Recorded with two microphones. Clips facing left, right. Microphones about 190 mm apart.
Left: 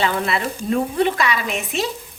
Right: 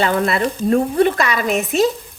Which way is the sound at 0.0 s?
45° right (ahead or behind).